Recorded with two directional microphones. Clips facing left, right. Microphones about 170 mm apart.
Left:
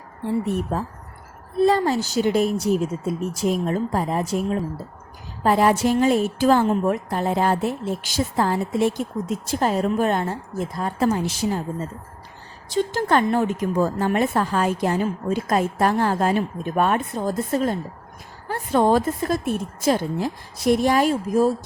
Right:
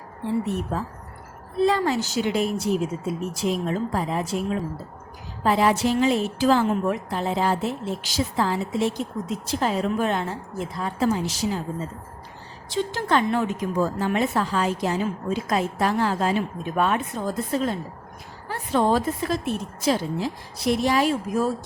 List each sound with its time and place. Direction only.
1.6 s a woman's voice: 40° left (ahead or behind)